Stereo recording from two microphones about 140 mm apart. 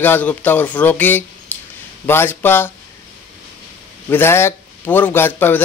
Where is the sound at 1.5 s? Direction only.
10° left (ahead or behind).